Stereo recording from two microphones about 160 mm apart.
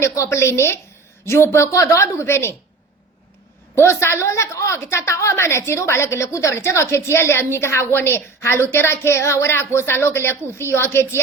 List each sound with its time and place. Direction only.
0.0 s a woman's voice: 20° left (ahead or behind)
3.8 s a woman's voice: 15° left (ahead or behind)